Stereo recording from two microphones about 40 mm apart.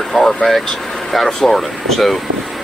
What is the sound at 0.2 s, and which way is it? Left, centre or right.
Speech, centre.